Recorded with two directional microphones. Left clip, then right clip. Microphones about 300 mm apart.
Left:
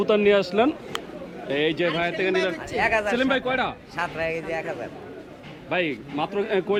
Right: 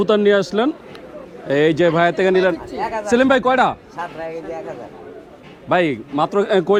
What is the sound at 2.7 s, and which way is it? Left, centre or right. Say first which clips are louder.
Speech: left 1 dB; left.